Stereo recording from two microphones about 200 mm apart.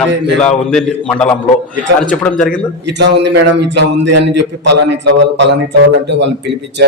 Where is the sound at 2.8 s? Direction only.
60° right (ahead or behind).